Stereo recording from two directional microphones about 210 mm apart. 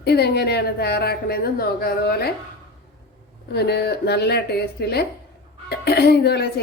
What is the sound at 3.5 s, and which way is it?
Speech, 50° left (ahead or behind).